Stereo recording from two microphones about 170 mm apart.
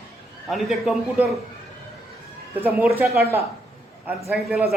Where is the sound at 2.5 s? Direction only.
10° right (ahead or behind).